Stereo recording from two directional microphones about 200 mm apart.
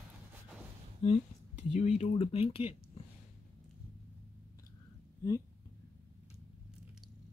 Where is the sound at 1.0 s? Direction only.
30° left (ahead or behind).